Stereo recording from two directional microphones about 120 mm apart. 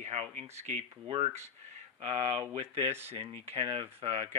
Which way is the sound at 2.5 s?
60° right (ahead or behind).